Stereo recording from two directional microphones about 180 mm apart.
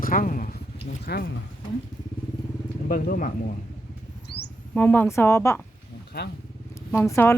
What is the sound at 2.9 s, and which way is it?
Speech, 50° left (ahead or behind).